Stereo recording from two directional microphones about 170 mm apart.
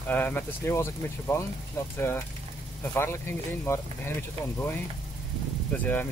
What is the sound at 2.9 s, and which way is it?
Speech, 15° left (ahead or behind).